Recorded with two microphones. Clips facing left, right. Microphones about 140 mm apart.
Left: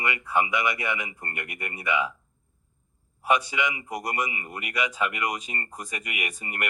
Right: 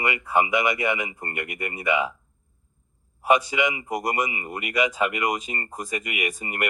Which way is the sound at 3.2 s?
45° right (ahead or behind).